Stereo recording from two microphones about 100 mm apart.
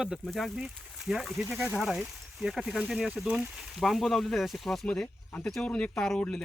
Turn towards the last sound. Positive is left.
turn(degrees=5)  # may be behind; listen again after turning